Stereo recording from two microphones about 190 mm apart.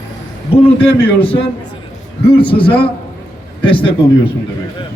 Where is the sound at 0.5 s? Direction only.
30° left (ahead or behind).